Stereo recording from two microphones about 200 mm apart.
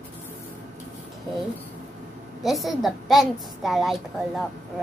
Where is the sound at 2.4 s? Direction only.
Centre (ahead or behind).